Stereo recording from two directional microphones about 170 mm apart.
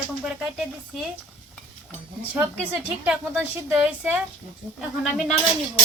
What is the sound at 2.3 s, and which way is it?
A woman's voice, 10° right (ahead or behind).